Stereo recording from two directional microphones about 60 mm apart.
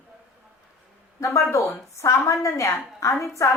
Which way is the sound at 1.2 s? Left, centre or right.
Left.